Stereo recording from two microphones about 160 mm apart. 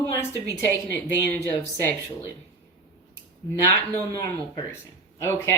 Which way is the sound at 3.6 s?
15° left (ahead or behind).